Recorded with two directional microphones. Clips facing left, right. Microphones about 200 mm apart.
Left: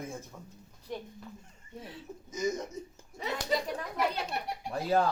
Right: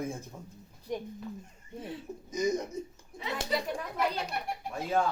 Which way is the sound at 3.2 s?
40° left (ahead or behind).